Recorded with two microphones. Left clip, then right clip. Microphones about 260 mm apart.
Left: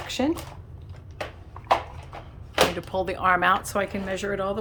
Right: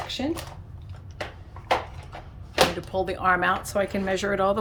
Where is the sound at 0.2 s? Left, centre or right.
Centre.